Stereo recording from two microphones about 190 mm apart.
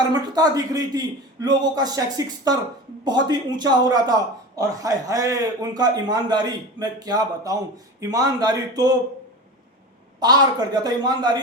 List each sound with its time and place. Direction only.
0.1 s a man's voice: 20° right (ahead or behind)
10.2 s a man's voice: 20° right (ahead or behind)